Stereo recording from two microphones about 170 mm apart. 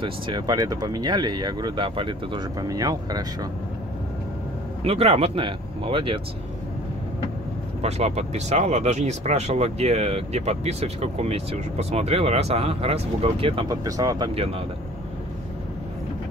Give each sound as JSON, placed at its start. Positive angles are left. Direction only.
{"t": 0.0, "sound": "speech", "side_deg": -25}
{"t": 4.8, "sound": "speech", "side_deg": -35}
{"t": 7.8, "sound": "speech", "side_deg": -40}
{"t": 13.7, "sound": "speech", "side_deg": -20}